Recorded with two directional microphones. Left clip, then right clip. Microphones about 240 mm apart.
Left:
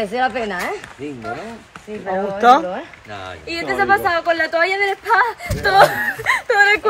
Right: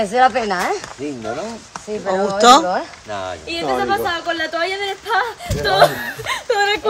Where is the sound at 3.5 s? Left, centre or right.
Centre.